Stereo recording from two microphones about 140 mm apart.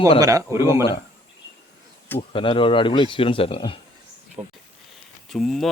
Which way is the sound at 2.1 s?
40° left (ahead or behind).